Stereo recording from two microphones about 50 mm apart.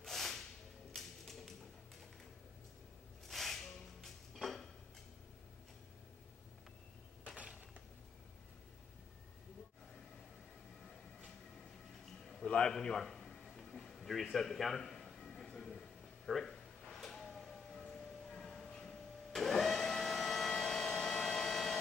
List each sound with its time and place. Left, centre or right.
0.0 s a sound: centre
0.9 s typewriter: centre
3.3 s rub: centre
12.4 s a sound: centre
14.3 s music: centre
16.3 s drawer open or close: centre